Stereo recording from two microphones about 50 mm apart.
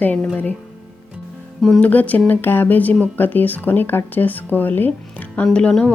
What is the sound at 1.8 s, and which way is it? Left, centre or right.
Speech, left.